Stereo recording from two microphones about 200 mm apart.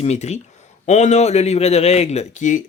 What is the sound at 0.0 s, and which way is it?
Speech, 35° left (ahead or behind).